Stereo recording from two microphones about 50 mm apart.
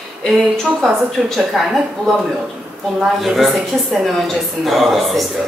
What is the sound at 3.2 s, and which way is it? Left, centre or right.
A woman's voice, centre.